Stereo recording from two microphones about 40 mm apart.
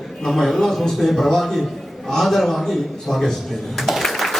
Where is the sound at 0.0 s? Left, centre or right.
Centre.